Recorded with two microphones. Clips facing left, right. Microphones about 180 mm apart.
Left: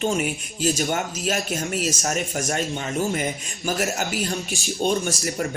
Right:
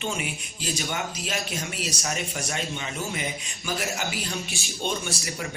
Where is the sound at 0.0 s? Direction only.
45° left (ahead or behind).